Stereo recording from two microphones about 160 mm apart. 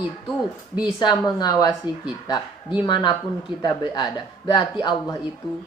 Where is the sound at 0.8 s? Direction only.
25° left (ahead or behind).